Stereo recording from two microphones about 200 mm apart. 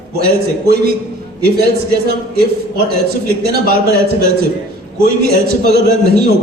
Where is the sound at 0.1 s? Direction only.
50° right (ahead or behind).